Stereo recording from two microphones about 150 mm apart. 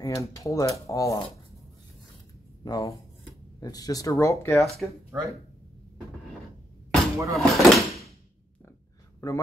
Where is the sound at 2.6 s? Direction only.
25° left (ahead or behind).